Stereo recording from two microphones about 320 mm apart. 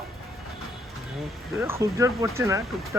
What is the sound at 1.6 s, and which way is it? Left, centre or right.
Speech, centre.